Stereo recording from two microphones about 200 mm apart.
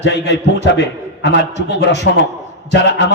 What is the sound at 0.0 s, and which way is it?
A man's voice, 60° left (ahead or behind).